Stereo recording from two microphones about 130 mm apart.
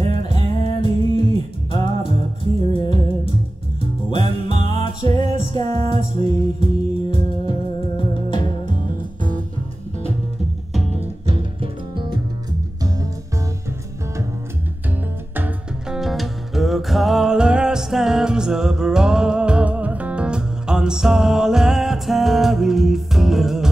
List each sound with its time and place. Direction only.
0.1 s music: 40° left (ahead or behind)
2.7 s music: 40° left (ahead or behind)
11.2 s music: 45° right (ahead or behind)
15.3 s music: 15° right (ahead or behind)
16.0 s music: centre (ahead or behind)